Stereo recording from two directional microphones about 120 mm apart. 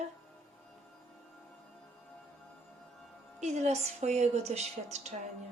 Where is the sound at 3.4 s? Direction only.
70° right (ahead or behind).